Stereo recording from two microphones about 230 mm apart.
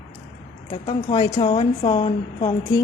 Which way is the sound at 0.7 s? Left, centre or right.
Left.